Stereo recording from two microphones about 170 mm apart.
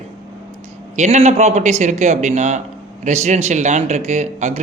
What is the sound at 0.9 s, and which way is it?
A man's voice, 40° right (ahead or behind).